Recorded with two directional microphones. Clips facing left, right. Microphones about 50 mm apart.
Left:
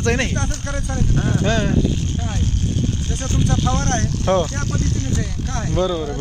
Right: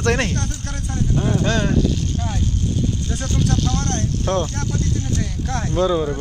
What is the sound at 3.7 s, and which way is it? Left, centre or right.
Speech, left.